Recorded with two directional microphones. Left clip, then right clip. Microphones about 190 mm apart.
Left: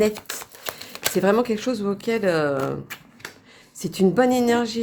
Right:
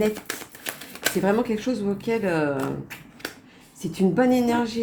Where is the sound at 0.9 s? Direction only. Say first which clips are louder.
Left 3 dB; 50° left (ahead or behind).